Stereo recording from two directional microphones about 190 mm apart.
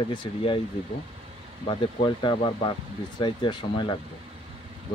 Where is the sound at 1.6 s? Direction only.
25° left (ahead or behind).